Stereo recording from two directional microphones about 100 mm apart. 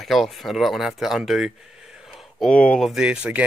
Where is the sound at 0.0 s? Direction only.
Centre (ahead or behind).